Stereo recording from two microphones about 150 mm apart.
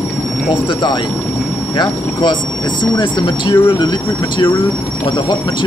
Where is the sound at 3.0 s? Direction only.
30° left (ahead or behind).